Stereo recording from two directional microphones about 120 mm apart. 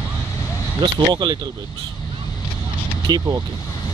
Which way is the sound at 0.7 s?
35° right (ahead or behind).